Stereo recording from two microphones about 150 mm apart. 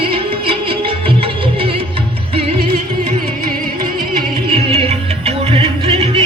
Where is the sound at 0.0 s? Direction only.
35° right (ahead or behind).